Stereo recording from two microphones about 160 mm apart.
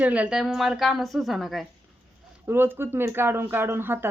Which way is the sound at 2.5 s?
15° right (ahead or behind).